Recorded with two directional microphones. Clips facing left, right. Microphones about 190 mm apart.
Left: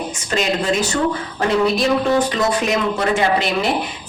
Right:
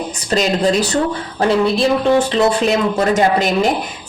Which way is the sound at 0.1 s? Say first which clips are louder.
Right 5 dB; 35° right (ahead or behind).